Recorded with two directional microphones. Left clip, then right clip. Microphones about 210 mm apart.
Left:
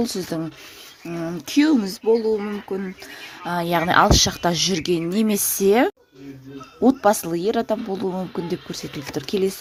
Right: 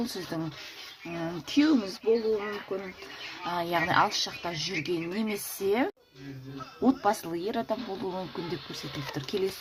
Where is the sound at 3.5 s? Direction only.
40° left (ahead or behind).